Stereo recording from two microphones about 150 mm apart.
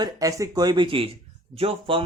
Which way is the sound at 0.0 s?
25° right (ahead or behind).